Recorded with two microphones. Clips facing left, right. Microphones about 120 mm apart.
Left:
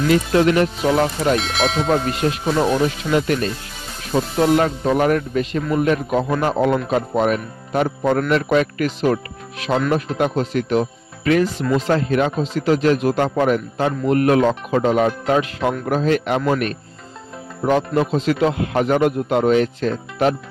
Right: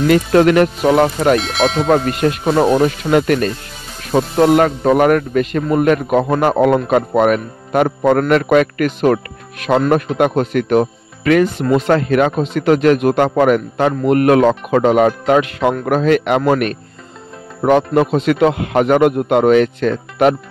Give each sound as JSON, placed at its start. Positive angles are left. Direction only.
{"t": 0.1, "sound": "speech", "side_deg": -60}
{"t": 1.4, "sound": "speech", "side_deg": 0}
{"t": 2.2, "sound": "speech", "side_deg": -55}